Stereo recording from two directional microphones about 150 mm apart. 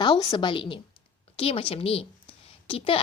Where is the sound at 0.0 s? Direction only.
30° left (ahead or behind).